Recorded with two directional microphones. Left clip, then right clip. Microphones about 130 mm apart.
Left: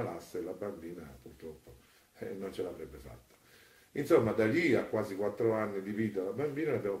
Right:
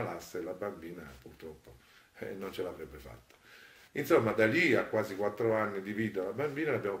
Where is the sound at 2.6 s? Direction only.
15° right (ahead or behind).